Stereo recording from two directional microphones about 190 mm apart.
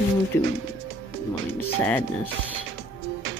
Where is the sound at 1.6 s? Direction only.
10° left (ahead or behind).